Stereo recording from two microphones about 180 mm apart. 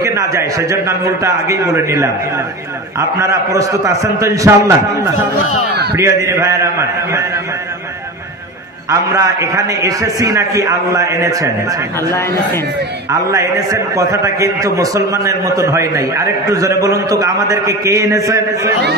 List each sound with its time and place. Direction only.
0.0 s a man's voice: 15° right (ahead or behind)
3.2 s a man's voice: 15° right (ahead or behind)
8.9 s a man's voice: 15° right (ahead or behind)
13.3 s a man's voice: 20° right (ahead or behind)